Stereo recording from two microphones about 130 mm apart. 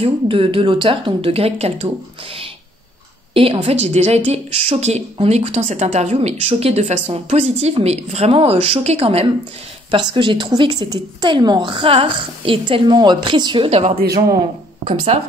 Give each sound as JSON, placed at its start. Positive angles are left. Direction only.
{"t": 0.0, "sound": "speech", "side_deg": -45}
{"t": 3.3, "sound": "a woman's voice", "side_deg": -50}
{"t": 10.8, "sound": "a woman's voice", "side_deg": -35}
{"t": 13.7, "sound": "speech", "side_deg": -50}